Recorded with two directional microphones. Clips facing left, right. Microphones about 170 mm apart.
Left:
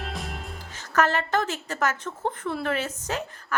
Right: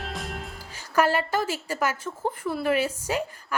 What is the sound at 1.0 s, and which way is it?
A woman's voice, 10° right (ahead or behind).